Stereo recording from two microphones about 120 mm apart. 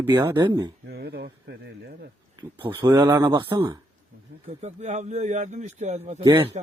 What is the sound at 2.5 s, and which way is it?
Speech, 45° right (ahead or behind).